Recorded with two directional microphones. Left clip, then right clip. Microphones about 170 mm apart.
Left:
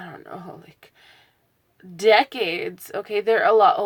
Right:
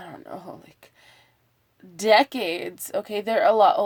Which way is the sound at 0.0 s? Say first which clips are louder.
Left 1 dB; 40° right (ahead or behind).